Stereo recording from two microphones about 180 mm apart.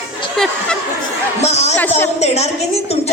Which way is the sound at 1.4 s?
35° left (ahead or behind).